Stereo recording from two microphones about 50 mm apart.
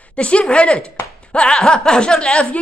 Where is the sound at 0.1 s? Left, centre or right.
Left.